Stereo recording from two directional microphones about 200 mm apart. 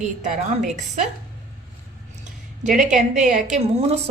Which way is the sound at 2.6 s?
40° right (ahead or behind).